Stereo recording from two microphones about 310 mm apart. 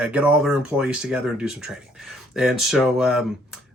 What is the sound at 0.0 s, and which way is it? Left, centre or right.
Speech, centre.